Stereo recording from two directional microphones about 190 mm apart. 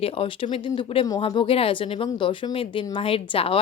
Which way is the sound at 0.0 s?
30° left (ahead or behind).